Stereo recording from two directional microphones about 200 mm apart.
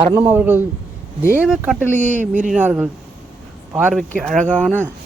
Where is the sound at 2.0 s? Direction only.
40° right (ahead or behind).